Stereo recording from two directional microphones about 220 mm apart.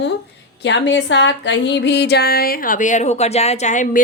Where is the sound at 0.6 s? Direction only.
55° left (ahead or behind).